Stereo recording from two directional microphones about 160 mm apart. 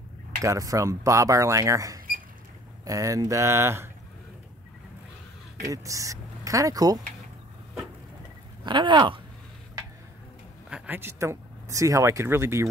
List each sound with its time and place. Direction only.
0.4 s speech: 20° right (ahead or behind)
5.7 s speech: 20° right (ahead or behind)
8.6 s speech: 30° right (ahead or behind)
10.7 s speech: 10° right (ahead or behind)